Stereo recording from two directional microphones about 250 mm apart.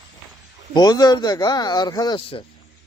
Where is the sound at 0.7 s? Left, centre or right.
Centre.